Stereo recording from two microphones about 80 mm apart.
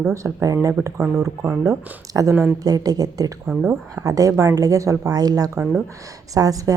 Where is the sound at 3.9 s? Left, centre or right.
Right.